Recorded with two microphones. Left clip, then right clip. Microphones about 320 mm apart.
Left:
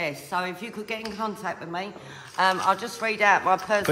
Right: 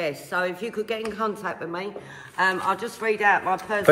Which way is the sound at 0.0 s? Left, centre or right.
Centre.